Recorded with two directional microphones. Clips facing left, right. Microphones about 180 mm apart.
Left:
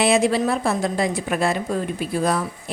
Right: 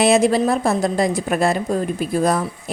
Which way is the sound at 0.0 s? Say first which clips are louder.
Right 3 dB; 40° right (ahead or behind).